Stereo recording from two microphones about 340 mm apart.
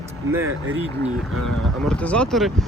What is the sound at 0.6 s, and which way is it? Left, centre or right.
Speech, right.